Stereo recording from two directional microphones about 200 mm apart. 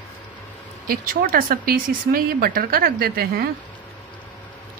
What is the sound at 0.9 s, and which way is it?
A woman's voice, 45° right (ahead or behind).